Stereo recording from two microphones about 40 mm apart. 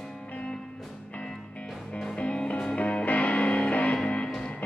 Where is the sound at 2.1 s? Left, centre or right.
Left.